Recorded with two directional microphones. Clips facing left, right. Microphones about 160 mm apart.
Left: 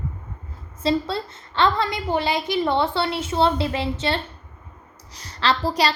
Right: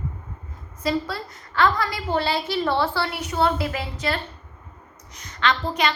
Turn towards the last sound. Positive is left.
turn(degrees=35)  # may be behind; listen again after turning